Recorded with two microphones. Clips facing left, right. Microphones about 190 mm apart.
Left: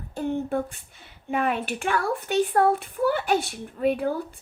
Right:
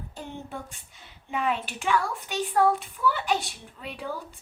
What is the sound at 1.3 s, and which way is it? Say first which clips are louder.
Speech: left 3 dB; 55° left (ahead or behind).